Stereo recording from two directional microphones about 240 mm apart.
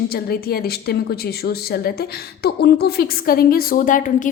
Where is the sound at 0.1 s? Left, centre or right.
Left.